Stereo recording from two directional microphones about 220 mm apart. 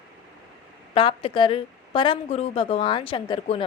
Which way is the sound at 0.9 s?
25° left (ahead or behind).